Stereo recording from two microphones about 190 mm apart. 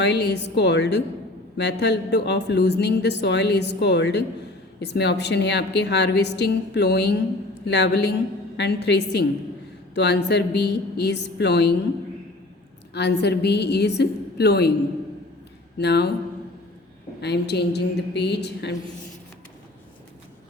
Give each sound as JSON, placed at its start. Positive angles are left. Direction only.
{"t": 0.0, "sound": "speech", "side_deg": 65}
{"t": 12.9, "sound": "speech", "side_deg": 60}
{"t": 15.8, "sound": "speech", "side_deg": 60}
{"t": 17.2, "sound": "speech", "side_deg": 60}